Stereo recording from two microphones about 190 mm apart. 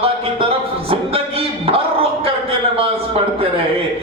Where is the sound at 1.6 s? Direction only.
30° right (ahead or behind).